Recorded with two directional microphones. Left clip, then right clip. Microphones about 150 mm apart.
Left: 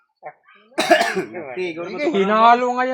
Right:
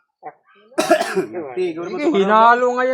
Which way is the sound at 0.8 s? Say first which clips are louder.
Even; 20° left (ahead or behind).